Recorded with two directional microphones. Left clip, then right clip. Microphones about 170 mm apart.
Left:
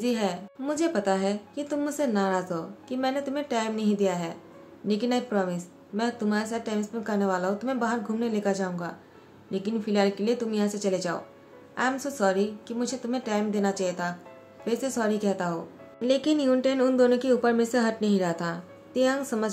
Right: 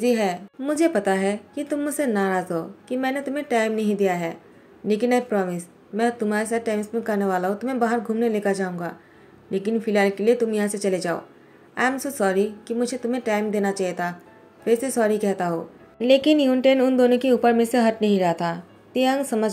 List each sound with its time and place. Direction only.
0.0 s speech: 20° right (ahead or behind)